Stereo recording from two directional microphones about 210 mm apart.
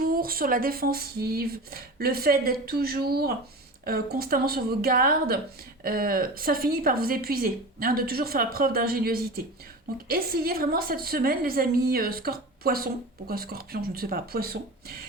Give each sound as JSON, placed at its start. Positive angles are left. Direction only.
{"t": 0.0, "sound": "a woman's voice", "side_deg": -45}